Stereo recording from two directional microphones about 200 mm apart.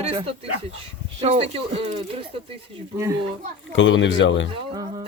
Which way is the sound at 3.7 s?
70° left (ahead or behind).